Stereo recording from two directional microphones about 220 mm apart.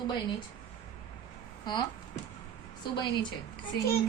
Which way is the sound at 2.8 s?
20° left (ahead or behind).